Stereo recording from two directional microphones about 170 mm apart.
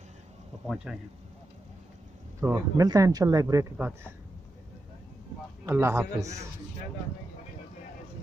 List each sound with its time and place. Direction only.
0.9 s speech: 5° right (ahead or behind)
2.4 s speech: 20° right (ahead or behind)
5.7 s speech: 15° right (ahead or behind)